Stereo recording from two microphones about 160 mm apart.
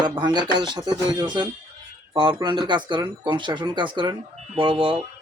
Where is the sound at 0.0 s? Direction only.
25° right (ahead or behind).